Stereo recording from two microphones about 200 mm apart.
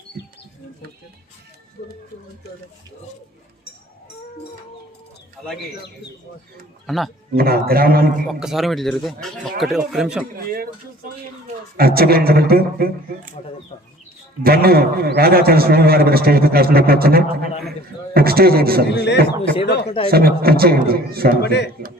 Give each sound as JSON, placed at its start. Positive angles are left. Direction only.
{"t": 6.8, "sound": "a man's voice", "side_deg": 0}
{"t": 7.3, "sound": "a man's voice", "side_deg": -50}
{"t": 8.3, "sound": "speech", "side_deg": 0}
{"t": 11.8, "sound": "a man's voice", "side_deg": -50}
{"t": 14.4, "sound": "a man's voice", "side_deg": -50}
{"t": 18.9, "sound": "a man's voice", "side_deg": 60}
{"t": 20.1, "sound": "a man's voice", "side_deg": -50}
{"t": 21.4, "sound": "a man's voice", "side_deg": 55}